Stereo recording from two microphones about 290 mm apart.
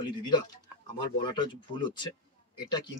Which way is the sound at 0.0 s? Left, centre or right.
Centre.